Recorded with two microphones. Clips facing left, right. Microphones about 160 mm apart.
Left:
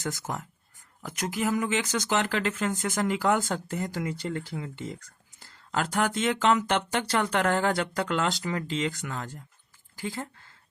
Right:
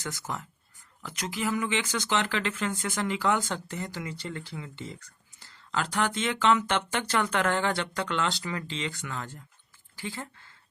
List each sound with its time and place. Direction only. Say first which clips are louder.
0.0 s speech: left 3 dB; 45° left (ahead or behind)